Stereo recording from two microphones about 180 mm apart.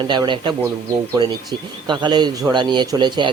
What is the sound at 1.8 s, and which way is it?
Speech, 25° right (ahead or behind).